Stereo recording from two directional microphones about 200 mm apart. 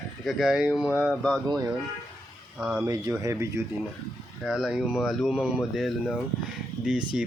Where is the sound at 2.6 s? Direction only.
5° right (ahead or behind).